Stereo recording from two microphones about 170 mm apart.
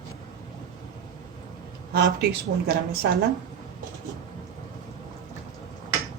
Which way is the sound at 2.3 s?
70° right (ahead or behind).